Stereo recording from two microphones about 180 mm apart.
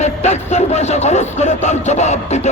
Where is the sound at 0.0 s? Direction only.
40° left (ahead or behind).